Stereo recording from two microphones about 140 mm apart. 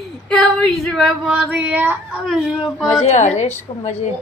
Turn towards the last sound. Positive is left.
turn(degrees=50)  # may be behind; listen again after turning